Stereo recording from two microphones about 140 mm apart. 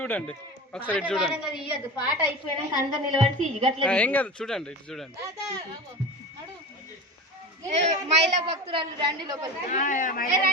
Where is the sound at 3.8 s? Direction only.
10° left (ahead or behind).